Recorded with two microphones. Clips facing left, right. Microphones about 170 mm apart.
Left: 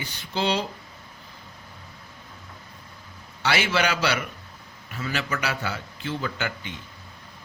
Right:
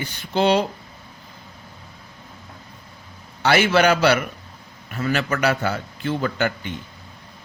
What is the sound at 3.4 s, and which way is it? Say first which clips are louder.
Speech: right 7 dB; 50° right (ahead or behind).